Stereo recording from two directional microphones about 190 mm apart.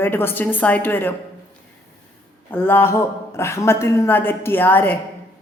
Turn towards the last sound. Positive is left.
turn(degrees=10)  # may be behind; listen again after turning